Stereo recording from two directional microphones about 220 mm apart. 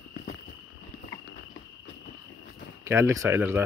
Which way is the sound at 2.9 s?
10° right (ahead or behind).